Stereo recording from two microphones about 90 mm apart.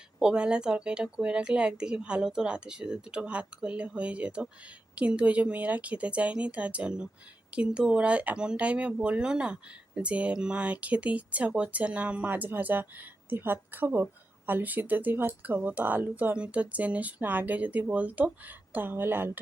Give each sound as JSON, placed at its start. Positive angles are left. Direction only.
{"t": 0.2, "sound": "speech", "side_deg": -10}